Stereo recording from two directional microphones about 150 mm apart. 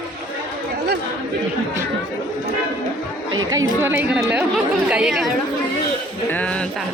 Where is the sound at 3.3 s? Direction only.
25° right (ahead or behind).